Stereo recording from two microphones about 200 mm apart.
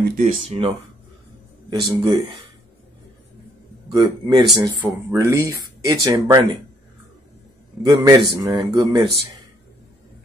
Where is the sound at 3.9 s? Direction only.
20° right (ahead or behind).